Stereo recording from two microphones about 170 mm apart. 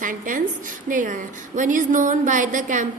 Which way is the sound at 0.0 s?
50° right (ahead or behind).